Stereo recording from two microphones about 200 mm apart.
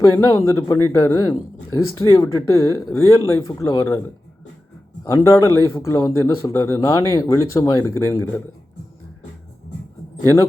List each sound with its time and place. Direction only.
0.0 s speech: 15° left (ahead or behind)
5.0 s speech: 15° left (ahead or behind)